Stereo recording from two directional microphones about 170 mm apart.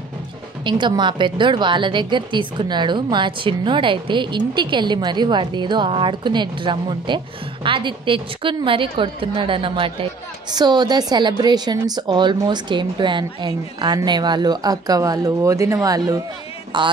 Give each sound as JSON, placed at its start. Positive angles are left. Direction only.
{"t": 0.7, "sound": "a woman's voice", "side_deg": -25}